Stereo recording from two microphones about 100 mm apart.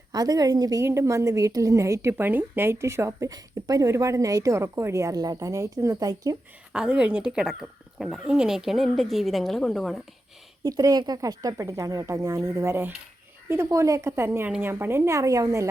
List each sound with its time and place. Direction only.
0.1 s a woman's voice: 40° right (ahead or behind)
3.1 s speech: 40° right (ahead or behind)
6.7 s speech: 10° right (ahead or behind)
10.6 s speech: 40° right (ahead or behind)
13.7 s a woman's voice: 35° right (ahead or behind)